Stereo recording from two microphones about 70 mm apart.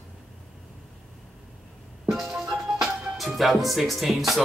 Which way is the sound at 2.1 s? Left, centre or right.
Centre.